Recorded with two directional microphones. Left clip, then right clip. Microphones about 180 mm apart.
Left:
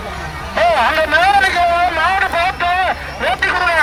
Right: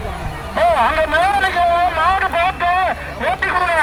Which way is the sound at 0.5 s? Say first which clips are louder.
Left 1 dB; 5° left (ahead or behind).